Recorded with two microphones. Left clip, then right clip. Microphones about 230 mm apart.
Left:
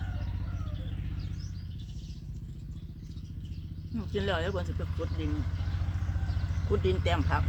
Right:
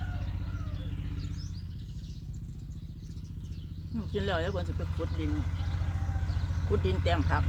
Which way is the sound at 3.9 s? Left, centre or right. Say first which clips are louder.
Even; centre.